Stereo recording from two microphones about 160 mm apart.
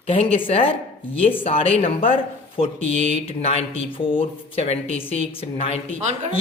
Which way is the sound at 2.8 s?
50° right (ahead or behind).